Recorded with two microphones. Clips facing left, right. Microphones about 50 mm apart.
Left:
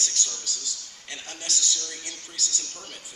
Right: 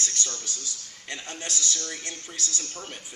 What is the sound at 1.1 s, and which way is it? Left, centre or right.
Speech, right.